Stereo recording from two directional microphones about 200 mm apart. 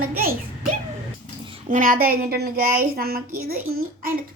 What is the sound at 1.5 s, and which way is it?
A woman's voice, 40° right (ahead or behind).